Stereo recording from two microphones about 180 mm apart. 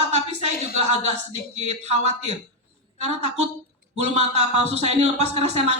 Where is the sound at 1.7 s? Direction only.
40° right (ahead or behind).